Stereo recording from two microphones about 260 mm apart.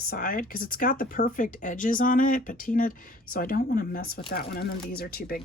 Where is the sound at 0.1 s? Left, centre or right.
Left.